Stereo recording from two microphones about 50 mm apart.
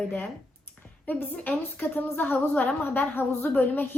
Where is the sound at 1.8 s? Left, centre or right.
Left.